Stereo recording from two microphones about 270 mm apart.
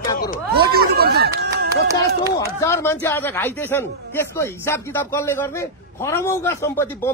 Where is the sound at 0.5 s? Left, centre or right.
Right.